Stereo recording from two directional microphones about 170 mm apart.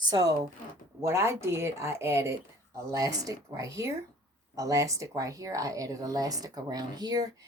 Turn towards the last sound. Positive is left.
turn(degrees=-25)  # may be behind; listen again after turning